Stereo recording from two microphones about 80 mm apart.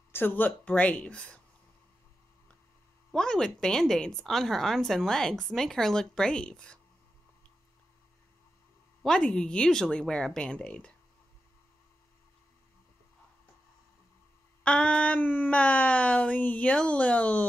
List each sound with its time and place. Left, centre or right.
0.1 s speech: left
3.1 s speech: centre
9.0 s speech: centre
14.6 s speech: centre